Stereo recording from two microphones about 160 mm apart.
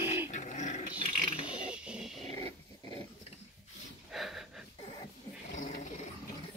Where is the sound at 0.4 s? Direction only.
50° left (ahead or behind).